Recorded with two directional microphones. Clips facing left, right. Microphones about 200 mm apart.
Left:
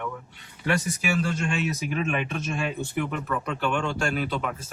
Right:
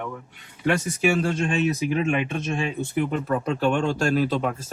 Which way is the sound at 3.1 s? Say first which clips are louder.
Right 5 dB; 40° right (ahead or behind).